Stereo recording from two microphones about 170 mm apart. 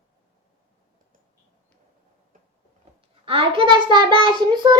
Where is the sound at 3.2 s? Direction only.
30° right (ahead or behind).